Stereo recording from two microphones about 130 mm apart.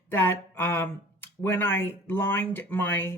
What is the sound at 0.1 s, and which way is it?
Speech, 20° left (ahead or behind).